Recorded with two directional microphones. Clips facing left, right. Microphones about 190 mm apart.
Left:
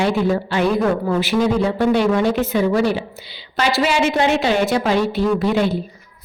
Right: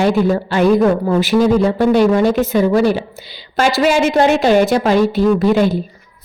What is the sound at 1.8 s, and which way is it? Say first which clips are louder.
A woman's voice: right 3 dB; 40° right (ahead or behind).